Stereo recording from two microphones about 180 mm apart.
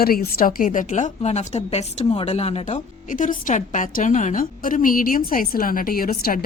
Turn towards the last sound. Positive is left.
turn(degrees=55)  # may be behind; listen again after turning